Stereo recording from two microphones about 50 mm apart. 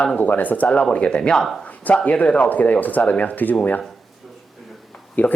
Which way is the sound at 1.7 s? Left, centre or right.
Left.